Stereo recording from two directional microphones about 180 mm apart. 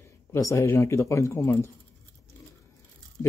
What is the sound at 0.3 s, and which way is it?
Speech, 15° left (ahead or behind).